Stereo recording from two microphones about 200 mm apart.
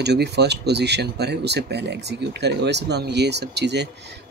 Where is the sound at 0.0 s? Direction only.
55° right (ahead or behind).